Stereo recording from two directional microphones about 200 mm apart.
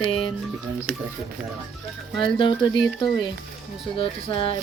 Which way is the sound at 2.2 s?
25° left (ahead or behind).